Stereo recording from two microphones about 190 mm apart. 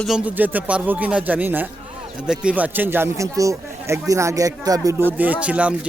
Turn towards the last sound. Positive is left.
turn(degrees=-5)  # may be behind; listen again after turning